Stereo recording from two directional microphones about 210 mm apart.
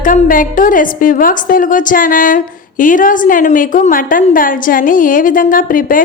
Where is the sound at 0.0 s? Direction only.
40° left (ahead or behind).